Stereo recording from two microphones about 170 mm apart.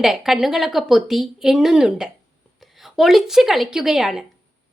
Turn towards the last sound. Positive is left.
turn(degrees=-5)  # may be behind; listen again after turning